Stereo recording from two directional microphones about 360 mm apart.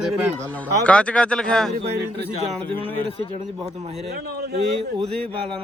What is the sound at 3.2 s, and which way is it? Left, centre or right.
Speech, centre.